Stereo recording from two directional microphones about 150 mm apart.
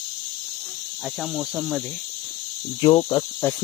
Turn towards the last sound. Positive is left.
turn(degrees=15)  # may be behind; listen again after turning